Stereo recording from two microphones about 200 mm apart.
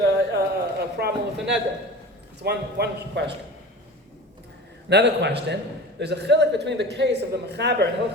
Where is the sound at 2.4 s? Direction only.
55° right (ahead or behind).